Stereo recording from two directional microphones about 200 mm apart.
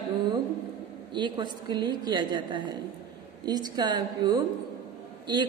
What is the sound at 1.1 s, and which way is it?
A man's voice, 25° right (ahead or behind).